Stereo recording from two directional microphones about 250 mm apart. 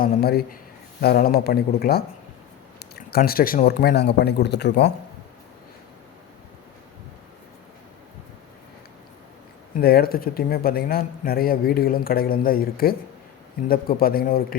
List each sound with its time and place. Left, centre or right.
0.0 s a man's voice: left
9.8 s a man's voice: left